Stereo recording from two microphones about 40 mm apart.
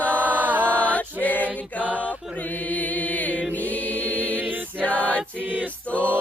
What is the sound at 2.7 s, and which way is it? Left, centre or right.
Chant, left.